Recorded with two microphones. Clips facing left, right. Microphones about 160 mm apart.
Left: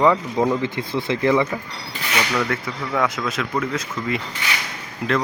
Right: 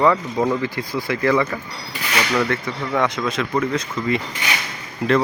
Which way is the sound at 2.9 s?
5° left (ahead or behind).